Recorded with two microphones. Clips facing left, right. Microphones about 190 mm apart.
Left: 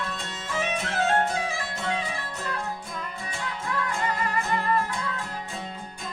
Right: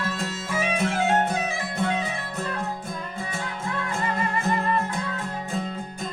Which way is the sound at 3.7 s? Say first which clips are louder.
Even; 25° right (ahead or behind).